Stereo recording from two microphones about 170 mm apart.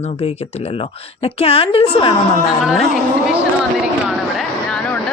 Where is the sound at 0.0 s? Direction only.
40° left (ahead or behind).